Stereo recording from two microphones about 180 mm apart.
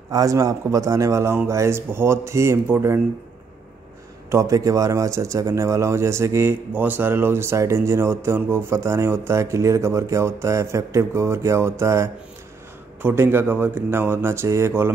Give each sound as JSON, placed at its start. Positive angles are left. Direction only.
{"t": 0.1, "sound": "a man's voice", "side_deg": -20}
{"t": 4.3, "sound": "a man's voice", "side_deg": -15}